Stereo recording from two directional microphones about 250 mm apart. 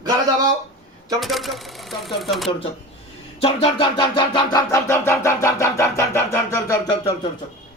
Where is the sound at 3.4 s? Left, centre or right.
Left.